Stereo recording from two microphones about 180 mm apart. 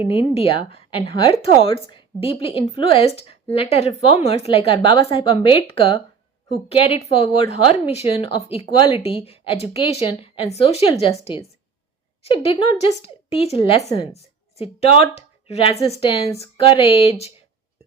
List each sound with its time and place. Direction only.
0.1 s a woman's voice: 30° left (ahead or behind)
12.2 s a woman's voice: 35° left (ahead or behind)